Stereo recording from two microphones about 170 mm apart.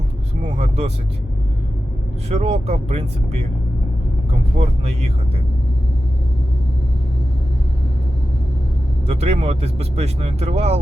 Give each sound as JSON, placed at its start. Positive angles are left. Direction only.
{"t": 0.5, "sound": "speech", "side_deg": -40}
{"t": 2.3, "sound": "speech", "side_deg": -40}
{"t": 4.5, "sound": "speech", "side_deg": -40}
{"t": 9.0, "sound": "speech", "side_deg": -40}